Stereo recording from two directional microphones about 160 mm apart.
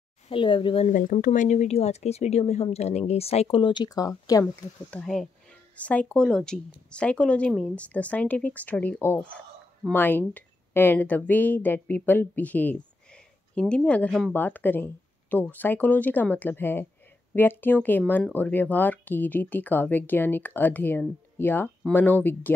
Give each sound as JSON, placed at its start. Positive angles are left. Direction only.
{"t": 0.3, "sound": "speech", "side_deg": 30}
{"t": 0.8, "sound": "speech", "side_deg": 55}
{"t": 4.9, "sound": "speech", "side_deg": 5}